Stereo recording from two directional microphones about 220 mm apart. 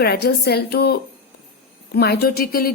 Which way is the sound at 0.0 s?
45° left (ahead or behind).